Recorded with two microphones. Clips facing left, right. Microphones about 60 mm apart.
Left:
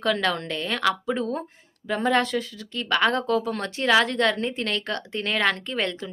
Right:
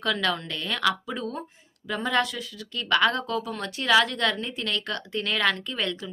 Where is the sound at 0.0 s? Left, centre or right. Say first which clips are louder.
Left 3 dB; left.